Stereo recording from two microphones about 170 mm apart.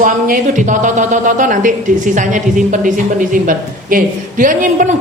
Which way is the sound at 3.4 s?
55° right (ahead or behind).